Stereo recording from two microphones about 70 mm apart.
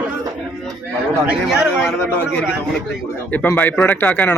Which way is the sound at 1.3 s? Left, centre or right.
Centre.